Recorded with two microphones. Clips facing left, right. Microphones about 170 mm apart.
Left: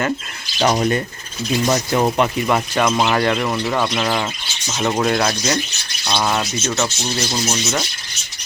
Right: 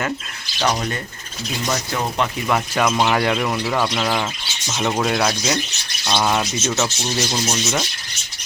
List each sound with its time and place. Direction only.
0.6 s speech: 20° left (ahead or behind)
2.1 s speech: 10° left (ahead or behind); by 7.9 s 5° right (ahead or behind)